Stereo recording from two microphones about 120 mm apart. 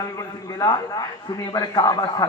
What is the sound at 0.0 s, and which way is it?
A man's voice, 30° left (ahead or behind).